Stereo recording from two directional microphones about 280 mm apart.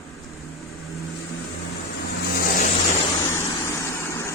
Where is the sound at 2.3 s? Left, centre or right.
Left.